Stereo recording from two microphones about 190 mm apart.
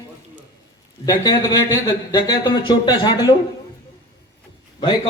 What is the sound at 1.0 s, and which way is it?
Speech, 20° left (ahead or behind).